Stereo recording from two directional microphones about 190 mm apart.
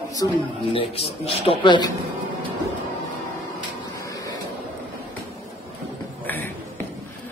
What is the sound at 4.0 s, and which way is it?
Vehicle, 20° left (ahead or behind).